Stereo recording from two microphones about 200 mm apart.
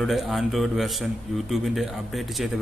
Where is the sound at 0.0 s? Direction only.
Centre (ahead or behind).